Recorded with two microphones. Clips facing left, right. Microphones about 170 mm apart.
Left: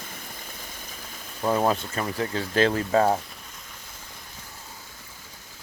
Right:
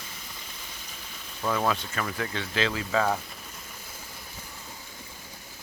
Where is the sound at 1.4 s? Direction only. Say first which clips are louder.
Left 4 dB; 35° left (ahead or behind).